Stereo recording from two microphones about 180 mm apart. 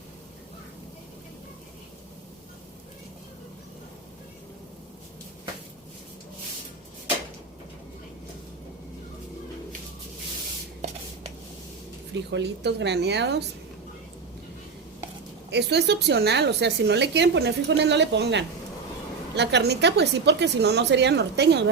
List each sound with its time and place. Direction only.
12.1 s a woman's voice: 75° right (ahead or behind)
15.4 s a woman's voice: 70° right (ahead or behind)